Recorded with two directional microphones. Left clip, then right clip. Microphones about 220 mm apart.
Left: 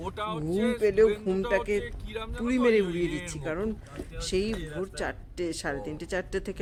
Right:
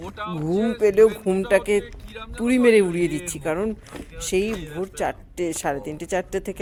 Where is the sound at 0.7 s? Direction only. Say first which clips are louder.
Right 7 dB; 20° right (ahead or behind).